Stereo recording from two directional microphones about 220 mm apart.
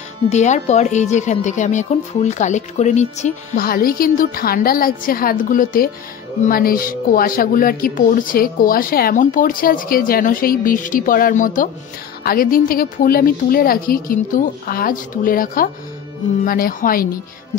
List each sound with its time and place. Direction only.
0.3 s speech: 30° left (ahead or behind)